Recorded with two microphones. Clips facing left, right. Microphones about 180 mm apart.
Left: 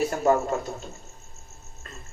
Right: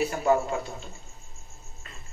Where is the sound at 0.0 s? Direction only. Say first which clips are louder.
Left 2 dB; 45° left (ahead or behind).